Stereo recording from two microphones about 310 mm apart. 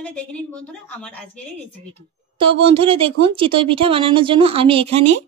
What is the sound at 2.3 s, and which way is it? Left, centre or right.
A woman's voice, centre.